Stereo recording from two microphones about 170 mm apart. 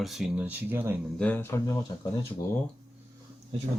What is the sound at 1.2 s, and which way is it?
Speech, 10° left (ahead or behind).